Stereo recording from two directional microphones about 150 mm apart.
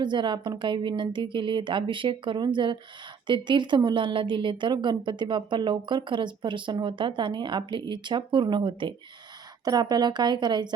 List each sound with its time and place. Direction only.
0.0 s speech: 30° right (ahead or behind)